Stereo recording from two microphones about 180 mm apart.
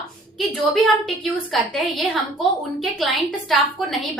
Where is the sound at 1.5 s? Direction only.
Centre (ahead or behind).